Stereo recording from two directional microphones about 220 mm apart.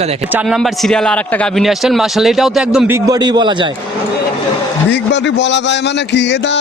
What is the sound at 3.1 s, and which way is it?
Speech, 20° right (ahead or behind).